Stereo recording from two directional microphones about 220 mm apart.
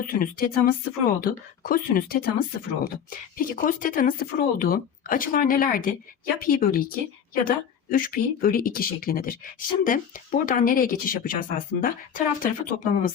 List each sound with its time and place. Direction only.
0.0 s speech: 40° left (ahead or behind)